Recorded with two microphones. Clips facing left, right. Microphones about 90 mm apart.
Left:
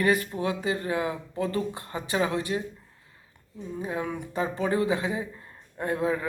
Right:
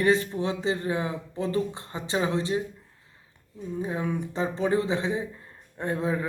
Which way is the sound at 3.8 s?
30° right (ahead or behind).